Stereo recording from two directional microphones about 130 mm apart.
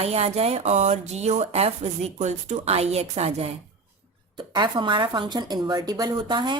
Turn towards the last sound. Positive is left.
turn(degrees=-35)  # may be behind; listen again after turning